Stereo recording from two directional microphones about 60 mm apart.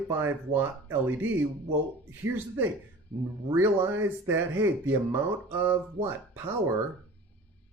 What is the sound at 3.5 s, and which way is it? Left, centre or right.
Speech, right.